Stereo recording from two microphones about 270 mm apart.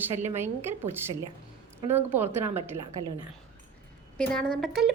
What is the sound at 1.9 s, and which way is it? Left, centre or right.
Speech, centre.